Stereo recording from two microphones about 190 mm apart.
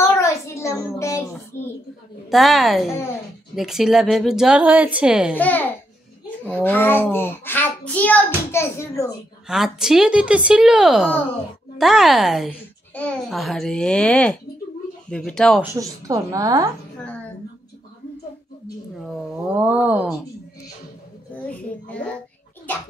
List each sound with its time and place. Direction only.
0.0 s a sound: 15° left (ahead or behind)
2.2 s a child's voice: centre (ahead or behind)
5.3 s a child's voice: 10° left (ahead or behind)
9.5 s a child's voice: centre (ahead or behind)
15.6 s a woman's voice: 15° right (ahead or behind)
18.9 s a child's voice: centre (ahead or behind)
21.4 s a child's voice: 5° left (ahead or behind)